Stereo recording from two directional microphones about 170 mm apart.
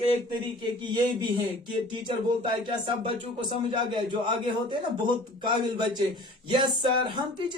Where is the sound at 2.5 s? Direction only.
30° right (ahead or behind).